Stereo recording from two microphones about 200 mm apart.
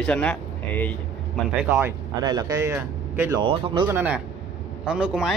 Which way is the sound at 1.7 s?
15° right (ahead or behind).